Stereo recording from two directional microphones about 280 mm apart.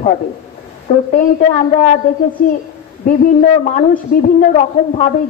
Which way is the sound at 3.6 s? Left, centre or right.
Left.